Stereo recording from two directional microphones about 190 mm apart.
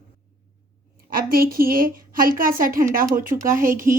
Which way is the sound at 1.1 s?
50° right (ahead or behind).